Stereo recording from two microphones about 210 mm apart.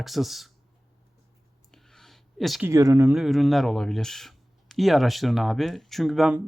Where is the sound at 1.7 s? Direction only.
Centre (ahead or behind).